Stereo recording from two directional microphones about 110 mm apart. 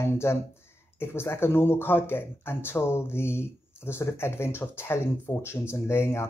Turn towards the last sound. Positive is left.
turn(degrees=25)  # may be behind; listen again after turning